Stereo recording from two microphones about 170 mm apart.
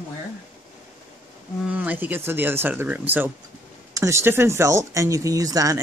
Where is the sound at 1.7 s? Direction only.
10° right (ahead or behind).